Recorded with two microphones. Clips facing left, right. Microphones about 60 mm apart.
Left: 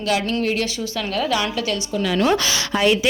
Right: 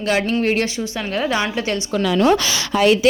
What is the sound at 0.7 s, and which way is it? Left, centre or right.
Speech, right.